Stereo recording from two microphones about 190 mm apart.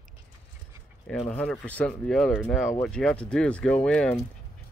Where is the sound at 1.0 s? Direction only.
5° left (ahead or behind).